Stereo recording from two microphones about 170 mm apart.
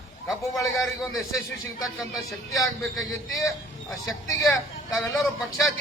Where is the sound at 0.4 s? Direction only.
20° left (ahead or behind).